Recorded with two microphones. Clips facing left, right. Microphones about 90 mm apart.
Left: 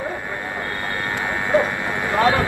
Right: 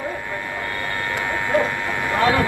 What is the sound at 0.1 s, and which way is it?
A man's voice, 20° left (ahead or behind).